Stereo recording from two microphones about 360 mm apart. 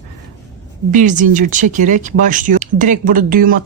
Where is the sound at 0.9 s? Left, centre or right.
Right.